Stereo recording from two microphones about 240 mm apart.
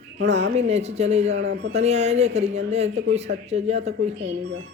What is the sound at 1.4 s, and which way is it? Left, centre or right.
Speech, right.